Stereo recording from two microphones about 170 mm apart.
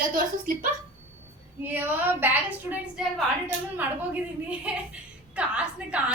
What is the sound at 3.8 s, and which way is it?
A woman's voice, 10° right (ahead or behind).